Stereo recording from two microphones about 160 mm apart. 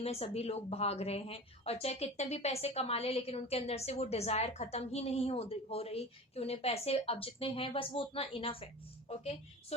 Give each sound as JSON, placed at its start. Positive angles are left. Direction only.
{"t": 0.0, "sound": "speech", "side_deg": 40}